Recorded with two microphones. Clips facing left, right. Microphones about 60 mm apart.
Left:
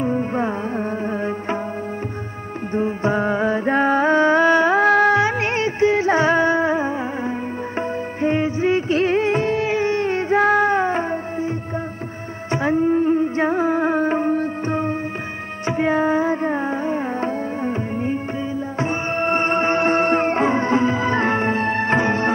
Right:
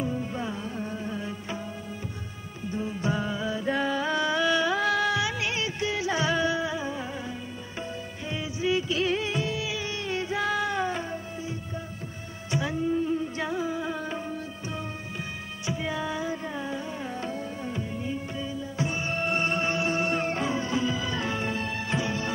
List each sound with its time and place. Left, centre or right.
0.0 s music: left
2.7 s music: left
8.2 s music: left
12.4 s music: left
18.8 s music: left